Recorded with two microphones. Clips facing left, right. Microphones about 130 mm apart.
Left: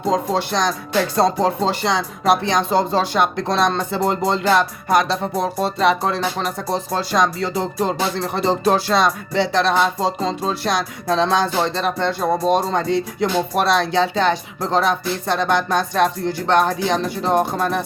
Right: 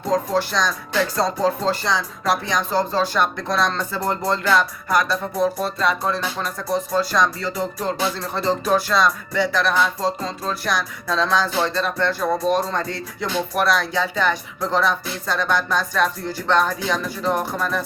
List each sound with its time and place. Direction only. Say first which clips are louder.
0.1 s speech: left 1 dB; 20° left (ahead or behind)
6.1 s speech: left 3 dB; 70° left (ahead or behind)
6.7 s speech: right 5 dB; 30° left (ahead or behind)